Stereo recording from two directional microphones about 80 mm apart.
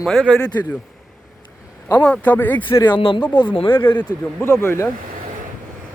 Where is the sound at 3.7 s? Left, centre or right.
Left.